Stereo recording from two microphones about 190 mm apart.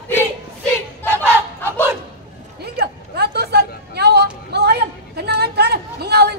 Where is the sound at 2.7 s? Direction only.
60° right (ahead or behind).